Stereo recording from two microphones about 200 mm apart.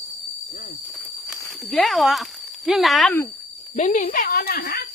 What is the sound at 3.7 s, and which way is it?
Speech, 40° left (ahead or behind).